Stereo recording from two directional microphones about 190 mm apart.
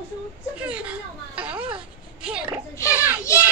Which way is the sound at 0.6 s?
5° right (ahead or behind).